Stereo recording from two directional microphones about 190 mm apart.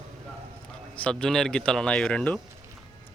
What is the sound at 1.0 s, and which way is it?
Speech, 5° left (ahead or behind).